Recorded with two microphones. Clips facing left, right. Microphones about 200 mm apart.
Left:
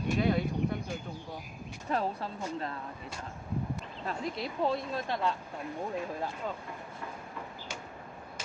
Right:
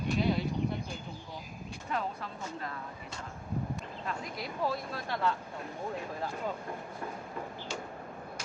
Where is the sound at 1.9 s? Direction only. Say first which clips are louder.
Left 4 dB; 35° left (ahead or behind).